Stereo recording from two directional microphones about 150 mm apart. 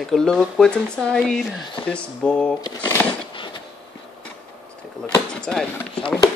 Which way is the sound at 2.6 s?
20° left (ahead or behind).